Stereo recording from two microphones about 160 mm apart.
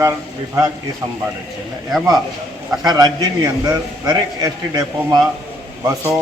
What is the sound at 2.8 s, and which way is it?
A man's voice, 25° right (ahead or behind).